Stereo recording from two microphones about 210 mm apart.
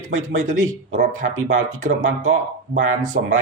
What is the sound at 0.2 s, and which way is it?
Speech, 35° right (ahead or behind).